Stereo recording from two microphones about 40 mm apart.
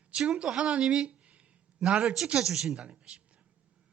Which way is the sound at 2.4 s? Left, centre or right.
Centre.